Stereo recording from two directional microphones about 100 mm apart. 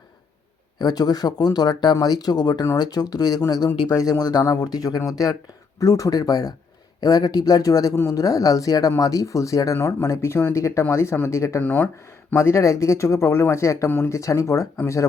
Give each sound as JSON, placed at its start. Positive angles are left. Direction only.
{"t": 0.8, "sound": "speech", "side_deg": 40}
{"t": 11.6, "sound": "speech", "side_deg": 20}
{"t": 11.9, "sound": "speech", "side_deg": 30}